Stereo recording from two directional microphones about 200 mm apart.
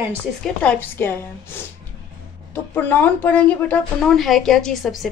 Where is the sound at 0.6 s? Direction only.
10° left (ahead or behind).